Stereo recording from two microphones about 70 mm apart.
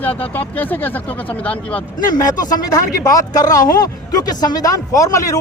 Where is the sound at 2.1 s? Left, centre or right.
Left.